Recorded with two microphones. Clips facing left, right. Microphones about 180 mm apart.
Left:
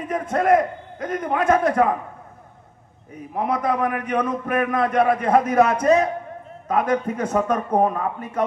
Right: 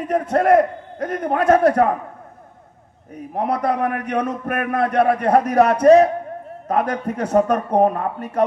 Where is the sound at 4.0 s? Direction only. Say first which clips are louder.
Right 1 dB; 65° right (ahead or behind).